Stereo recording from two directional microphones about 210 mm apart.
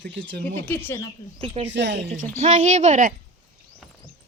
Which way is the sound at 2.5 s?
35° right (ahead or behind).